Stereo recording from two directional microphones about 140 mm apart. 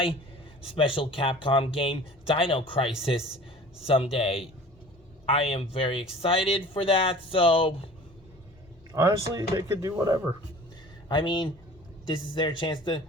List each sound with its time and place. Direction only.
0.9 s speech: 40° left (ahead or behind)
9.0 s speech: 25° right (ahead or behind)
11.1 s speech: 35° left (ahead or behind)